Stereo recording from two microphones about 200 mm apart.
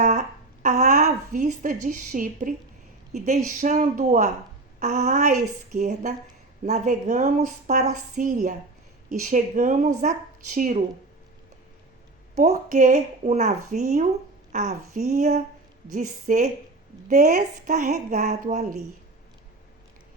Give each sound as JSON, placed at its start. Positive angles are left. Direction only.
{"t": 0.0, "sound": "a sound", "side_deg": -40}
{"t": 3.1, "sound": "a woman's voice", "side_deg": -40}
{"t": 12.4, "sound": "a woman's voice", "side_deg": -40}